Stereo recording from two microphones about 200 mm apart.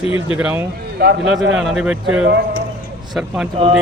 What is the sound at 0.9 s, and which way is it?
Speech, 50° right (ahead or behind).